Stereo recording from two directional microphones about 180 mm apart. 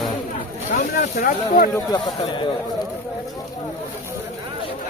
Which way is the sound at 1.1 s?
50° left (ahead or behind).